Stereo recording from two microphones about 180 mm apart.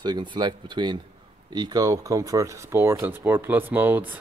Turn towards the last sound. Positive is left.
turn(degrees=-10)  # may be behind; listen again after turning